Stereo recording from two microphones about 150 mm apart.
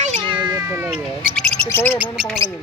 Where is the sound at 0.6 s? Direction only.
20° right (ahead or behind).